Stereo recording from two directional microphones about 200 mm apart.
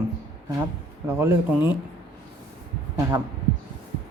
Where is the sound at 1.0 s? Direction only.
15° right (ahead or behind).